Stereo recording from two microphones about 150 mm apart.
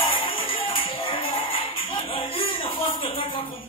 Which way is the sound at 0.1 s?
35° left (ahead or behind).